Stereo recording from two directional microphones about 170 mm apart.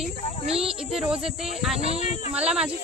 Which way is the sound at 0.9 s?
5° right (ahead or behind).